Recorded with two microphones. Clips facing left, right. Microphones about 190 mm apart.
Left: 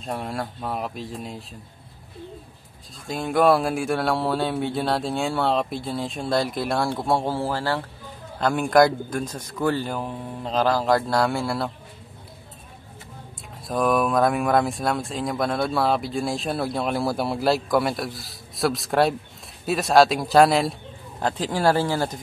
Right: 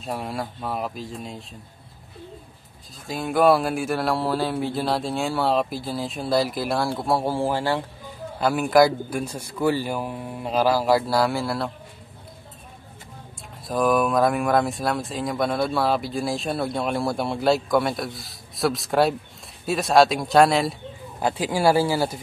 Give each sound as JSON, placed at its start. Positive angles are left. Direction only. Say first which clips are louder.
{"t": 0.0, "sound": "speech", "louder": "even", "side_deg": 0}
{"t": 3.1, "sound": "speech", "louder": "even", "side_deg": 0}
{"t": 7.2, "sound": "a man's voice", "louder": "right 2 dB", "side_deg": -15}
{"t": 8.4, "sound": "a man's voice", "louder": "even", "side_deg": -5}
{"t": 13.7, "sound": "a man's voice", "louder": "right 1 dB", "side_deg": 0}